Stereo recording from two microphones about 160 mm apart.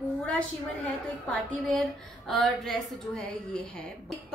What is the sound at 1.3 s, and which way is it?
A woman's voice, centre (ahead or behind).